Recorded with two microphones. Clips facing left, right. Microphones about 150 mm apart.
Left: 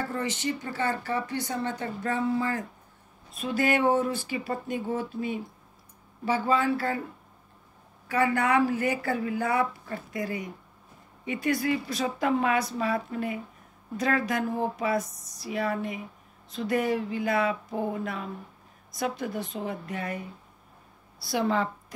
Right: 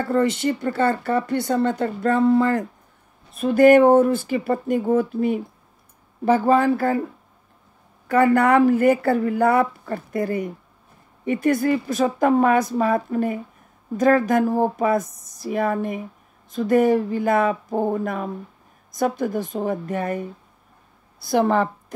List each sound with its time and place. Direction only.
0.1 s speech: 55° right (ahead or behind)
3.4 s speech: 50° right (ahead or behind)
8.1 s speech: 55° right (ahead or behind)
21.3 s speech: 50° right (ahead or behind)